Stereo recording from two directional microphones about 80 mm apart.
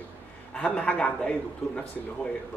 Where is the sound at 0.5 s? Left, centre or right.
Centre.